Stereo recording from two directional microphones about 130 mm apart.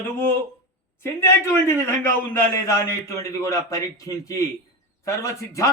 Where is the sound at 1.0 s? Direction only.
20° left (ahead or behind).